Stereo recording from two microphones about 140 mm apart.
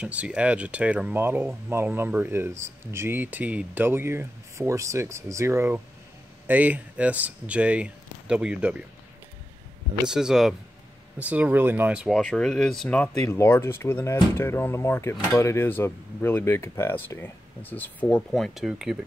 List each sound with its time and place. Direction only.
0.0 s speech: 10° right (ahead or behind)
10.0 s speech: 5° right (ahead or behind)
12.2 s speech: 5° left (ahead or behind)
13.2 s speech: 20° left (ahead or behind)
18.3 s speech: centre (ahead or behind)